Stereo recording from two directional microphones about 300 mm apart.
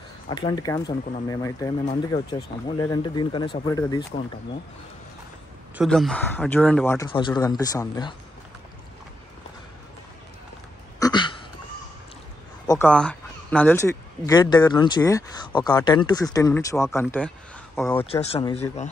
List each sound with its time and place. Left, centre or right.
0.3 s speech: centre
5.8 s speech: centre
11.0 s a sound: centre
12.6 s speech: centre
18.1 s speech: centre